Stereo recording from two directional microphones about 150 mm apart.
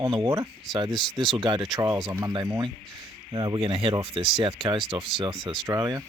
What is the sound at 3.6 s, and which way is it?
Speech, 40° right (ahead or behind).